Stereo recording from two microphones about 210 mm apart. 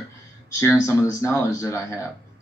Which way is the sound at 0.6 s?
15° left (ahead or behind).